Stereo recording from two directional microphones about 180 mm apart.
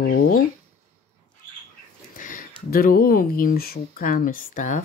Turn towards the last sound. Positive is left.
turn(degrees=45)  # may be behind; listen again after turning